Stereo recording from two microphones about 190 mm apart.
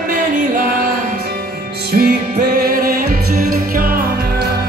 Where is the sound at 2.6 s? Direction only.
55° right (ahead or behind).